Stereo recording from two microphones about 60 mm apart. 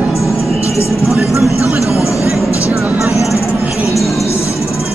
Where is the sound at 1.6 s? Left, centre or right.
Left.